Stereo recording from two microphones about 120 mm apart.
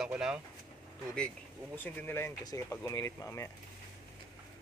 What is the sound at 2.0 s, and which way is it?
Speech, 20° left (ahead or behind).